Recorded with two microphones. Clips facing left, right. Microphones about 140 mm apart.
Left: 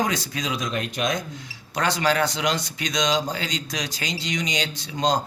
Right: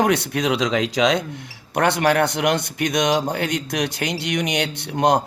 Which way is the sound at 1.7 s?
60° right (ahead or behind).